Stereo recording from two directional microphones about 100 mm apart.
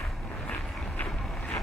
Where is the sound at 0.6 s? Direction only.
Centre (ahead or behind).